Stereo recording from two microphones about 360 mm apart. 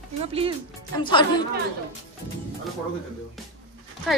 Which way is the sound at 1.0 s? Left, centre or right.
Centre.